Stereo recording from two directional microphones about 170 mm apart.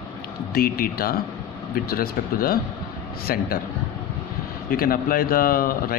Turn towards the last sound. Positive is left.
turn(degrees=60)  # may be behind; listen again after turning